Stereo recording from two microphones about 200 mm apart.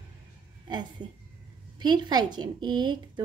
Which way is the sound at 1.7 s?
20° right (ahead or behind).